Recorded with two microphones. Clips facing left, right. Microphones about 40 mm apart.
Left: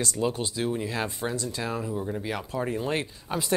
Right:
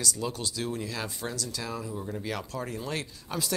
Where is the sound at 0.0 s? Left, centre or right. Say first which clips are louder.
Left 5 dB; left.